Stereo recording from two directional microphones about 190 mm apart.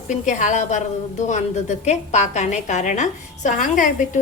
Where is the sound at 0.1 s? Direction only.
40° left (ahead or behind).